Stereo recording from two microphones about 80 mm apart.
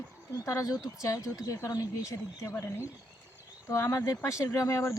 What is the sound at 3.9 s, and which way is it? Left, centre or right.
Speech, left.